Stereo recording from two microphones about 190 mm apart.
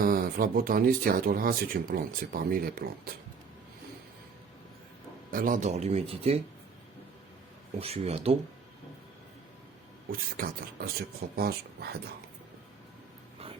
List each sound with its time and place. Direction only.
0.0 s speech: 50° right (ahead or behind)
5.3 s speech: 45° right (ahead or behind)
7.8 s speech: 30° right (ahead or behind)
10.1 s speech: 50° right (ahead or behind)